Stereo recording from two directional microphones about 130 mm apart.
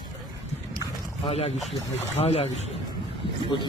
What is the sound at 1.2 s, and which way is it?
Speech, 50° left (ahead or behind).